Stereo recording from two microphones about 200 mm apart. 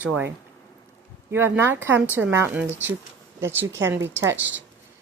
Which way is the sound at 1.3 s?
10° right (ahead or behind).